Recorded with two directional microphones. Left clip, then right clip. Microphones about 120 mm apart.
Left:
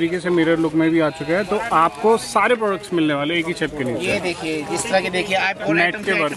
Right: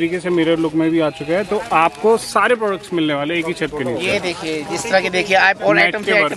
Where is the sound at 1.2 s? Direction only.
15° right (ahead or behind).